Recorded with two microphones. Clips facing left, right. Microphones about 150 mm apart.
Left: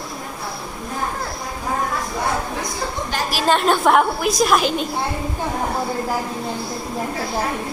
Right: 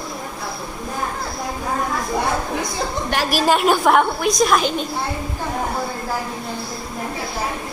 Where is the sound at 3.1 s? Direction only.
65° right (ahead or behind).